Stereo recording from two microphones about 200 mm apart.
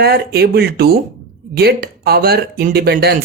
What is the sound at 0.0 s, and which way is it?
Speech, 50° right (ahead or behind).